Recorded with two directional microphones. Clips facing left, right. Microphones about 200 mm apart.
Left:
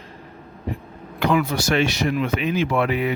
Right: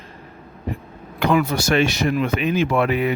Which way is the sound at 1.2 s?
50° right (ahead or behind).